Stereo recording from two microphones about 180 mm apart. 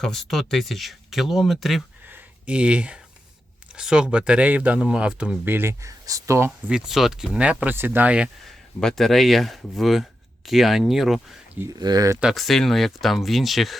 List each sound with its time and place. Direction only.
0.0 s speech: centre (ahead or behind)
2.0 s a sound: 10° right (ahead or behind)
3.8 s speech: 5° right (ahead or behind)
6.7 s speech: 5° right (ahead or behind)
11.6 s speech: 20° right (ahead or behind)
12.2 s speech: centre (ahead or behind)